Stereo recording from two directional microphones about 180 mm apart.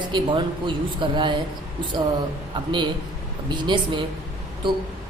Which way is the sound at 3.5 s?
25° right (ahead or behind).